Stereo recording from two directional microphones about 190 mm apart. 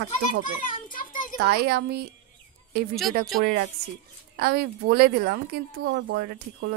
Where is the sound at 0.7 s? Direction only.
45° left (ahead or behind).